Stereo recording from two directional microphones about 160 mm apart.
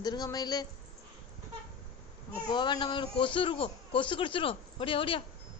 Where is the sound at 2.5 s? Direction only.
30° left (ahead or behind).